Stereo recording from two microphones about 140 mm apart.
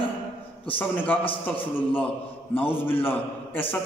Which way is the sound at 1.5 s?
40° left (ahead or behind).